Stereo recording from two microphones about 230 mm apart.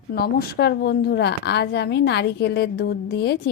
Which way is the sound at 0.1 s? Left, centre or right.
Left.